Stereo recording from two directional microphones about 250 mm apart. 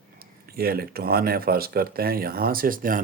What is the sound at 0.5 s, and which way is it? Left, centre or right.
Speech, right.